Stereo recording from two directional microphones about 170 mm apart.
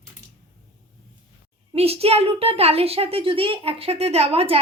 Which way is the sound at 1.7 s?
35° right (ahead or behind).